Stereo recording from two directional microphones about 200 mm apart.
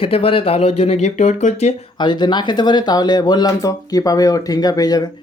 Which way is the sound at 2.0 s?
20° left (ahead or behind).